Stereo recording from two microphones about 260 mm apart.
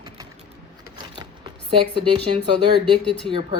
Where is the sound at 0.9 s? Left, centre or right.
Centre.